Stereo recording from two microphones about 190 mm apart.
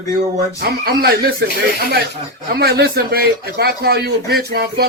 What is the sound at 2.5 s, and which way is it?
Speech, 55° right (ahead or behind).